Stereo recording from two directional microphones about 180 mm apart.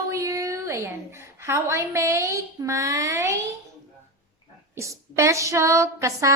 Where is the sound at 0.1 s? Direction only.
15° right (ahead or behind).